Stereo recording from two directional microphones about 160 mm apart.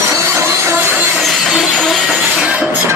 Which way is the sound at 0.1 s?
15° right (ahead or behind).